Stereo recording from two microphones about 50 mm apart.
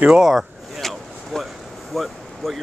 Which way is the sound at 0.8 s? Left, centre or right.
Centre.